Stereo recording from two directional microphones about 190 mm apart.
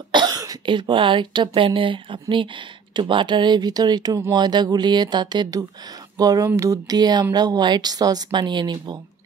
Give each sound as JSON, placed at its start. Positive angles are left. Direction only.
{"t": 0.1, "sound": "speech", "side_deg": -20}